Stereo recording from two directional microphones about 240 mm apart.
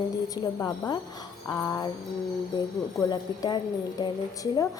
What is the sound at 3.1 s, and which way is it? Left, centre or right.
Speech, centre.